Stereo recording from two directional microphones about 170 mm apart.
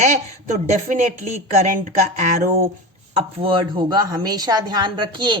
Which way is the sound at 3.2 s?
30° right (ahead or behind).